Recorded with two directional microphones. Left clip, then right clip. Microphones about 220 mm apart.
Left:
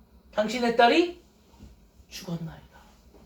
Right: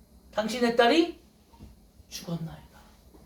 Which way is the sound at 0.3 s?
35° right (ahead or behind).